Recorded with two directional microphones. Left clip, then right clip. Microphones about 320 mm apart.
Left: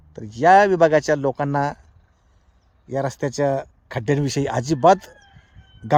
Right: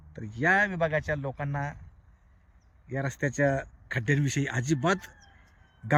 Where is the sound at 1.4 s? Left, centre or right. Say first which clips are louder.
Left 13 dB; left.